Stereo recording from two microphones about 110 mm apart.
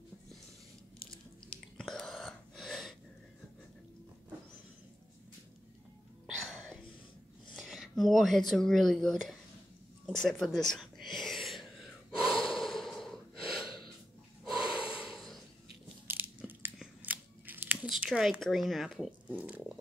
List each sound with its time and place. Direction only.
1.8 s a sound: 5° left (ahead or behind)
6.2 s music: 5° right (ahead or behind)
7.5 s speech: 5° right (ahead or behind)
10.1 s a sound: 5° left (ahead or behind)
14.4 s snort: 5° right (ahead or behind)
14.9 s a sound: 5° right (ahead or behind)
16.1 s biting: 20° right (ahead or behind)
18.0 s speech: 10° right (ahead or behind)
19.2 s speech: 15° right (ahead or behind)